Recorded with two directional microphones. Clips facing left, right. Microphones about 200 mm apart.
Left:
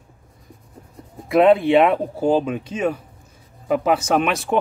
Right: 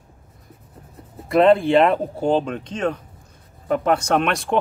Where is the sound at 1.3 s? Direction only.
Centre (ahead or behind).